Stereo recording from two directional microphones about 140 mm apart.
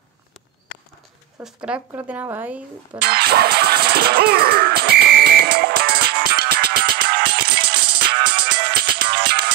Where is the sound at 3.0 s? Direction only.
90° right.